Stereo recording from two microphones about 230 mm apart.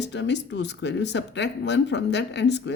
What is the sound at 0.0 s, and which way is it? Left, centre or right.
Speech, left.